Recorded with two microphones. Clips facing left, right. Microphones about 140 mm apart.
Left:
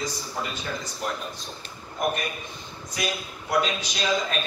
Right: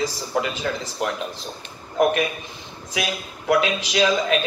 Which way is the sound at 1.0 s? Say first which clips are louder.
Right 6 dB; 90° right.